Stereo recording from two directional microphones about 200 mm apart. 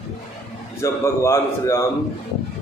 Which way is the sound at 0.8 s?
15° left (ahead or behind).